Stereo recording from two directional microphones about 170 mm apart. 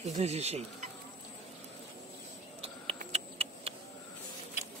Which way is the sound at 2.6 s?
35° right (ahead or behind).